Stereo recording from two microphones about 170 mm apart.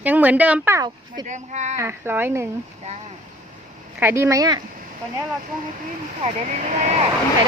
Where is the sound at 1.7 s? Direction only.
15° right (ahead or behind).